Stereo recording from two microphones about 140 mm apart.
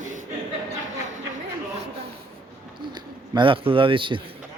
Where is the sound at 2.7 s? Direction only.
35° right (ahead or behind).